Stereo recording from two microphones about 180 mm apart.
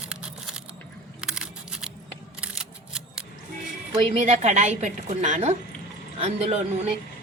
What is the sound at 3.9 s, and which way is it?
A woman's voice, 35° right (ahead or behind).